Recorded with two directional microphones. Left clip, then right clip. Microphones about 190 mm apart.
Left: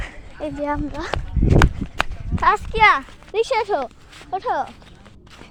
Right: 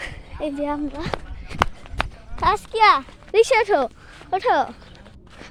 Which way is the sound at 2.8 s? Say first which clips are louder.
Left 1 dB; 20° right (ahead or behind).